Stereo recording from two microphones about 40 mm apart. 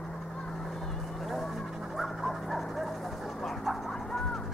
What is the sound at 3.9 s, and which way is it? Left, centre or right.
Music, centre.